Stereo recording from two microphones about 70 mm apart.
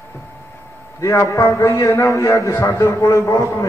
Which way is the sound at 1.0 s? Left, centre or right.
Left.